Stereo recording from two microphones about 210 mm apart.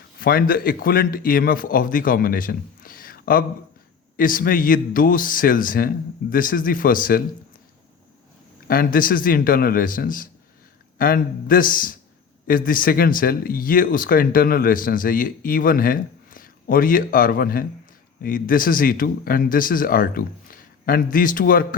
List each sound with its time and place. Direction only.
0.2 s speech: 45° left (ahead or behind)
8.6 s speech: 45° left (ahead or behind)